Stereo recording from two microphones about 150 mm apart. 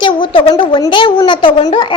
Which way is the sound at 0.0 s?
35° left (ahead or behind).